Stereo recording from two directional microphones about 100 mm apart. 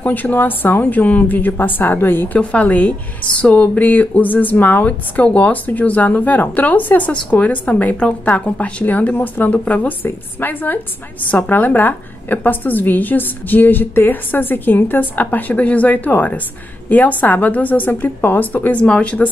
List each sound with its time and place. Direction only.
0.0 s a woman's voice: 20° left (ahead or behind)